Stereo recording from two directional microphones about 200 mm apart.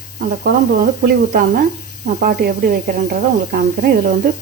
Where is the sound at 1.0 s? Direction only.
50° right (ahead or behind).